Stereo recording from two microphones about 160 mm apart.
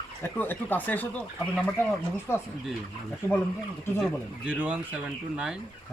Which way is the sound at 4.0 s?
5° right (ahead or behind).